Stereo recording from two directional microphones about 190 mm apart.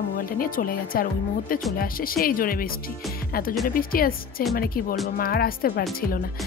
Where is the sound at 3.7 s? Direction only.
50° left (ahead or behind).